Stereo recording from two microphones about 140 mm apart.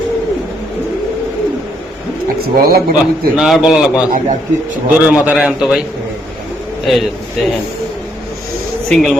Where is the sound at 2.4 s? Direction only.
90° right.